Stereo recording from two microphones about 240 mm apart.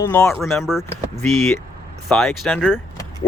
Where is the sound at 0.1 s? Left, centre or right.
Centre.